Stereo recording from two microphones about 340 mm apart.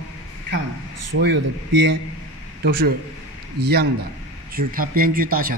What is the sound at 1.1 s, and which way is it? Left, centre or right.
Speech, right.